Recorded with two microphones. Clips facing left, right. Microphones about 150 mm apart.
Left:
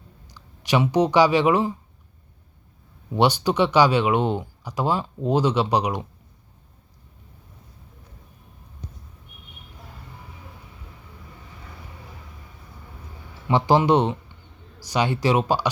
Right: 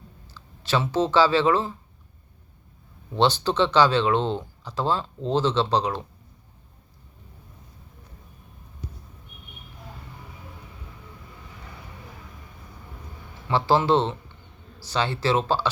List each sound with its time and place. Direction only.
0.3 s speech: 15° left (ahead or behind)
3.1 s speech: 10° left (ahead or behind)
8.8 s a sound: 5° right (ahead or behind)
13.5 s speech: 15° left (ahead or behind)